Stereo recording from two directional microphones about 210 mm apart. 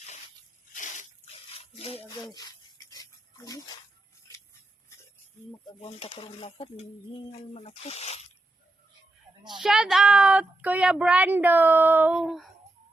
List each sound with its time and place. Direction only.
0.7 s a sound: 35° left (ahead or behind)
2.3 s dog: 20° left (ahead or behind)
5.6 s speech: 25° left (ahead or behind)
9.6 s a woman's voice: 5° right (ahead or behind)